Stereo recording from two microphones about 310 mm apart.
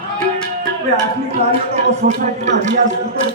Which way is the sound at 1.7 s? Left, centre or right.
Right.